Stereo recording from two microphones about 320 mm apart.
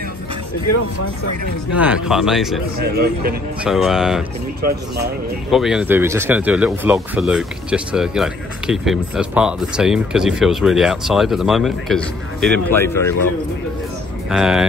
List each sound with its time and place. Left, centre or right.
1.8 s speech: centre
2.8 s speech: right
3.6 s speech: centre
4.6 s speech: right
5.5 s speech: centre
14.3 s speech: centre